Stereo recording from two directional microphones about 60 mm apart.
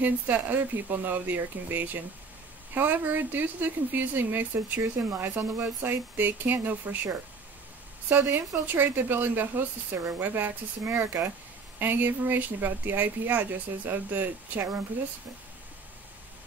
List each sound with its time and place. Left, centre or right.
0.0 s speech: right